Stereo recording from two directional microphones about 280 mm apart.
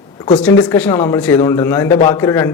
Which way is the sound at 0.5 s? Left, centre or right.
Centre.